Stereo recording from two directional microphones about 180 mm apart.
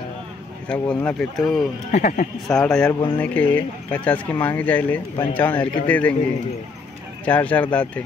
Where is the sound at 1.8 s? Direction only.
40° left (ahead or behind).